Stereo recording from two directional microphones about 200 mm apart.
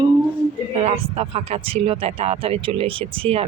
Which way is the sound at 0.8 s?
35° right (ahead or behind).